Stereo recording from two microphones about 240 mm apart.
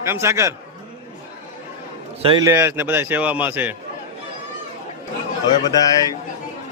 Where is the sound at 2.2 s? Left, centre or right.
Right.